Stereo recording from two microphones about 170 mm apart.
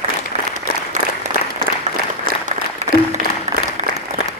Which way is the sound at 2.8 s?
40° right (ahead or behind).